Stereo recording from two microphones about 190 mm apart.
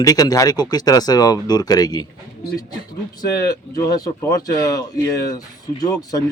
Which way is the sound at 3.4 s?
20° left (ahead or behind).